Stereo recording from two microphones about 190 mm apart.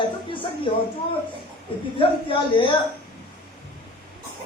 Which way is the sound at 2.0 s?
25° left (ahead or behind).